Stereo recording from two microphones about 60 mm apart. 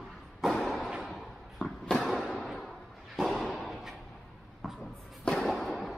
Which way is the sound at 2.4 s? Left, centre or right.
Centre.